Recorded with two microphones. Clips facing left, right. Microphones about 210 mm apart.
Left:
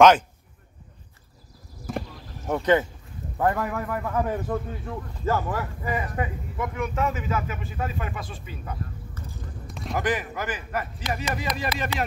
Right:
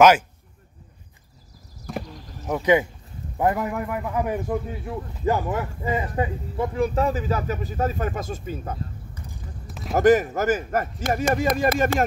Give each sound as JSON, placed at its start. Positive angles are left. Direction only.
{"t": 1.9, "sound": "horse", "side_deg": 0}
{"t": 3.3, "sound": "a man's voice", "side_deg": -20}
{"t": 9.7, "sound": "basketball bounce", "side_deg": 0}
{"t": 9.9, "sound": "speech", "side_deg": -45}